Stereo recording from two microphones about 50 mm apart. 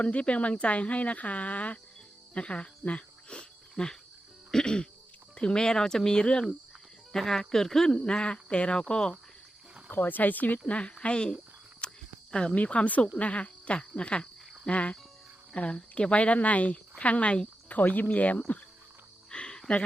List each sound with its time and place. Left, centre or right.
0.0 s speech: left
2.3 s cricket: left
4.5 s throat clearing: centre
5.3 s speech: centre
7.9 s speech: centre
9.9 s speech: left
10.7 s speech: left
11.8 s cricket: centre
12.3 s speech: centre
19.3 s cricket: centre